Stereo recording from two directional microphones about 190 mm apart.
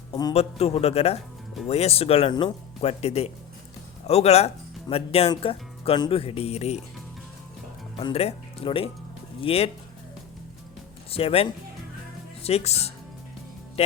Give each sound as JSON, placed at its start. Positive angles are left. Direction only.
{"t": 0.1, "sound": "a man's voice", "side_deg": 20}
{"t": 0.3, "sound": "speech", "side_deg": 30}
{"t": 7.9, "sound": "speech", "side_deg": 30}
{"t": 11.1, "sound": "speech", "side_deg": 30}